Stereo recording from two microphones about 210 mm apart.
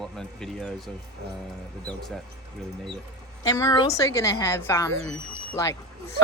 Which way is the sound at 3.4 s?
15° left (ahead or behind).